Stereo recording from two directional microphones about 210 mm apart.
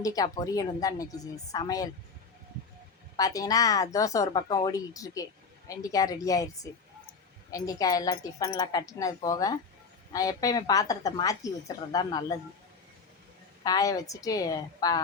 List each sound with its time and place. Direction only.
0.0 s speech: 15° left (ahead or behind)
3.2 s speech: 15° left (ahead or behind)
13.7 s speech: 15° left (ahead or behind)